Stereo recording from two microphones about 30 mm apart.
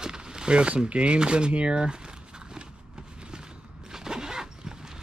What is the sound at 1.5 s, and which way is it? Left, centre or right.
Walk, right.